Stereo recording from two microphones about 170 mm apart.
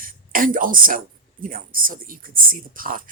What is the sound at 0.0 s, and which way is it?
Speech, 55° right (ahead or behind).